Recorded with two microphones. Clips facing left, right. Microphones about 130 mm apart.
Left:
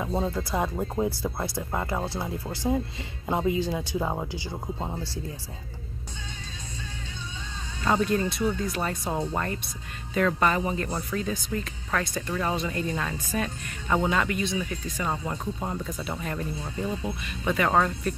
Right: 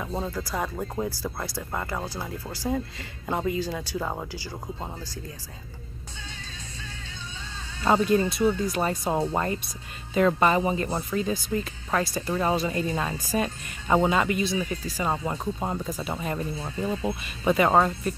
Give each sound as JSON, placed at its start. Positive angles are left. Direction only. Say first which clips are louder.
{"t": 0.0, "sound": "speech", "louder": "left 3 dB", "side_deg": 5}
{"t": 0.3, "sound": "speech", "louder": "left 2 dB", "side_deg": 25}
{"t": 1.6, "sound": "speech", "louder": "left 2 dB", "side_deg": 15}
{"t": 4.9, "sound": "speech", "louder": "left 4 dB", "side_deg": 30}
{"t": 7.8, "sound": "speech", "louder": "right 3 dB", "side_deg": -10}
{"t": 8.7, "sound": "speech", "louder": "right 3 dB", "side_deg": -20}
{"t": 14.7, "sound": "speech", "louder": "right 2 dB", "side_deg": -15}